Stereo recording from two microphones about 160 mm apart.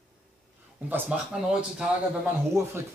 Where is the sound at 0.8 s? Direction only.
10° right (ahead or behind).